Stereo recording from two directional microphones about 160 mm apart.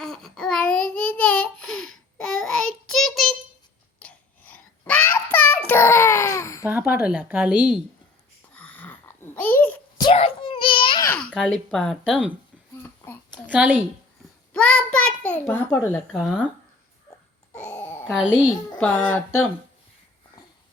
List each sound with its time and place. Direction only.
0.0 s child singing: 5° left (ahead or behind); by 6.7 s 20° left (ahead or behind)
6.7 s speech: 10° right (ahead or behind)
8.5 s babbling: 10° left (ahead or behind)
10.0 s a sound: 35° left (ahead or behind)
11.0 s babbling: 10° left (ahead or behind)
11.3 s speech: 5° left (ahead or behind)
12.7 s a sound: 15° left (ahead or behind)
13.5 s speech: 10° right (ahead or behind)
14.5 s a sound: 5° left (ahead or behind)
17.5 s dog: 10° left (ahead or behind)
18.1 s speech: 5° right (ahead or behind)
18.8 s speech: 5° left (ahead or behind)